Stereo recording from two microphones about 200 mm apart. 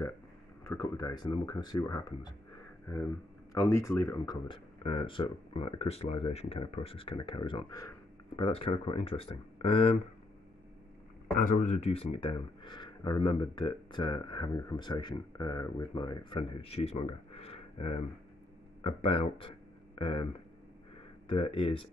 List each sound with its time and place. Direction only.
0.7 s speech: 15° left (ahead or behind)
11.4 s speech: 35° left (ahead or behind)
21.3 s speech: 25° left (ahead or behind)